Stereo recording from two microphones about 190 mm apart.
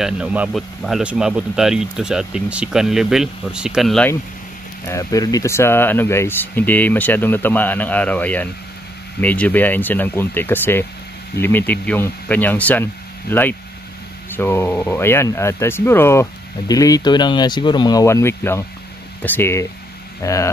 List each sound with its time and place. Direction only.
0.0 s speech: 5° right (ahead or behind)
4.8 s speech: 15° left (ahead or behind)